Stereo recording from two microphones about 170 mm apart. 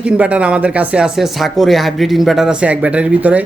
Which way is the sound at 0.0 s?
5° right (ahead or behind).